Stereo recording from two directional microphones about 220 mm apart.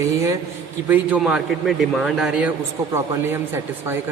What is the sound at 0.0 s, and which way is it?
A man's voice, 15° right (ahead or behind).